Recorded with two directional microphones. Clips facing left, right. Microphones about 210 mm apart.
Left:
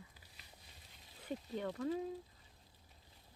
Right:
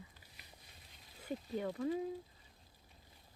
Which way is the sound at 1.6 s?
5° right (ahead or behind).